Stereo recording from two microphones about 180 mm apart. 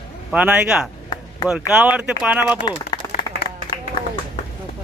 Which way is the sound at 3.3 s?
65° left (ahead or behind).